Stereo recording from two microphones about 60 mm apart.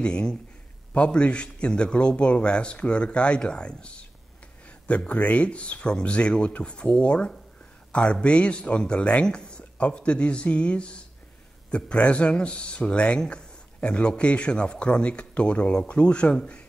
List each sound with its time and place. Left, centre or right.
0.0 s a man's voice: centre